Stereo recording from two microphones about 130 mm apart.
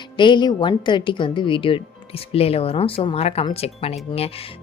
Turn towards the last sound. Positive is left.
turn(degrees=50)  # may be behind; listen again after turning